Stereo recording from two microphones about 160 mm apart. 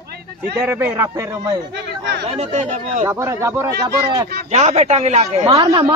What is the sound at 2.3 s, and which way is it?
Speech, 45° right (ahead or behind).